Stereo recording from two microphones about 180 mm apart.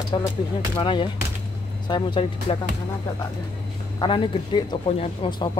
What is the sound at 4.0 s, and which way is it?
Speech, 25° left (ahead or behind).